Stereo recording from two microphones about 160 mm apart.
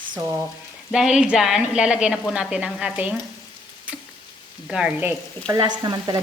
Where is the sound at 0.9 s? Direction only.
5° right (ahead or behind).